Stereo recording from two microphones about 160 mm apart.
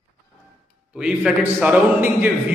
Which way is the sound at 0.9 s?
5° right (ahead or behind).